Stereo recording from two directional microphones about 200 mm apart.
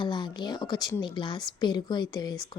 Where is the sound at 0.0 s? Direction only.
25° left (ahead or behind).